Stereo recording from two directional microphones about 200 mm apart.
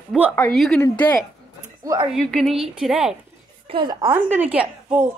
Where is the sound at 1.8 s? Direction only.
15° right (ahead or behind).